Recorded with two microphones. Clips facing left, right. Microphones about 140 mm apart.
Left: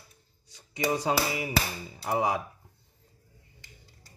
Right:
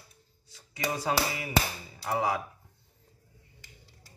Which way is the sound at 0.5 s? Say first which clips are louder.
Left 4 dB; 20° left (ahead or behind).